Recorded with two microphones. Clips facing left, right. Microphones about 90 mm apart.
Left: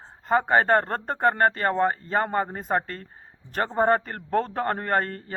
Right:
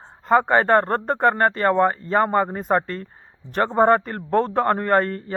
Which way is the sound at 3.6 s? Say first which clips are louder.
Right 5 dB; 35° right (ahead or behind).